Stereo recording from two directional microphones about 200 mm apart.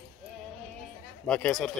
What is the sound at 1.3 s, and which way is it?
Speech, 5° left (ahead or behind).